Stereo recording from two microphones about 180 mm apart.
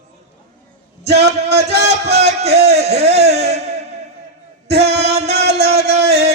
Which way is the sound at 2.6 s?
35° right (ahead or behind).